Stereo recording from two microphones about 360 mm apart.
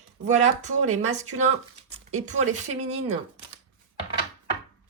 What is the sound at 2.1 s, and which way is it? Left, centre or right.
Speech, centre.